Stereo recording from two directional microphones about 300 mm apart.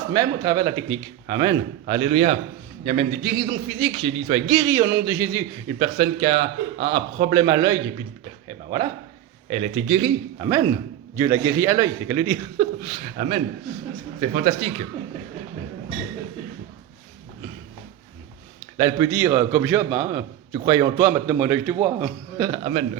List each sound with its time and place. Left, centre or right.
0.1 s a man's voice: centre
9.5 s a man's voice: centre
18.8 s a man's voice: centre